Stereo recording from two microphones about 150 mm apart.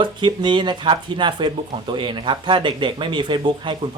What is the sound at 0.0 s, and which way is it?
Speech, 30° right (ahead or behind).